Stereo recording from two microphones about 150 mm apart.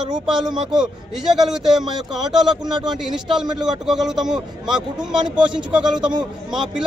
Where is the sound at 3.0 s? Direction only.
5° right (ahead or behind).